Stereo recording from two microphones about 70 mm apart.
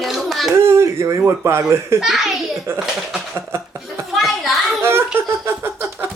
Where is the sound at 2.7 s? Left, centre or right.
Right.